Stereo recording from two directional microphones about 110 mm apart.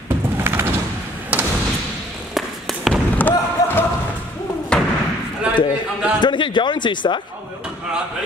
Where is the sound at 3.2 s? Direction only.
15° left (ahead or behind).